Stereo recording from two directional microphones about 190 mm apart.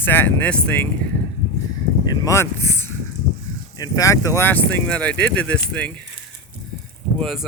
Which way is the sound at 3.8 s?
15° left (ahead or behind).